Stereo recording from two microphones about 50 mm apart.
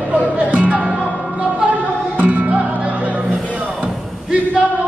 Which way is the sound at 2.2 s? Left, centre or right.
Right.